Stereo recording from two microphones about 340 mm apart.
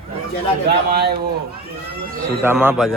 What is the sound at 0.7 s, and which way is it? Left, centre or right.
Speech, right.